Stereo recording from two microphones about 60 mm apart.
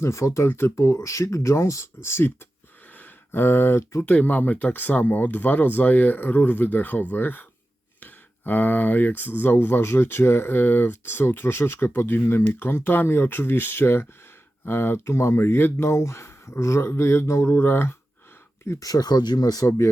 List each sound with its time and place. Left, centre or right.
0.0 s speech: left
4.1 s speech: left
18.8 s speech: left